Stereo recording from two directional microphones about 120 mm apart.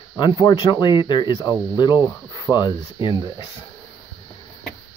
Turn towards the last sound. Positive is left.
turn(degrees=40)  # may be behind; listen again after turning